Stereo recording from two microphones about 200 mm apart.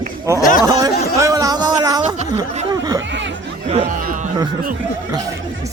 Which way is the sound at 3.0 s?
65° right (ahead or behind).